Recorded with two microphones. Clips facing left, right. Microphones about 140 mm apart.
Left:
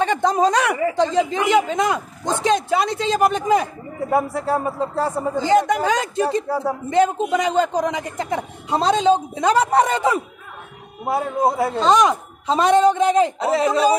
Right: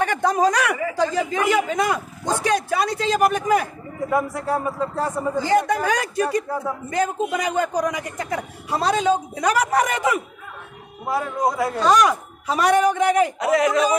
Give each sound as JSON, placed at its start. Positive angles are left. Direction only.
{"t": 0.0, "sound": "speech", "side_deg": 20}
{"t": 5.3, "sound": "speech", "side_deg": 20}